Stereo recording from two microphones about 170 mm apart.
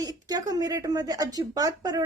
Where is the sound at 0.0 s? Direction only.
20° right (ahead or behind).